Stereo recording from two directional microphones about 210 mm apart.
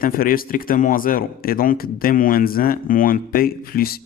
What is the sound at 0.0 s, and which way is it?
Speech, 40° left (ahead or behind).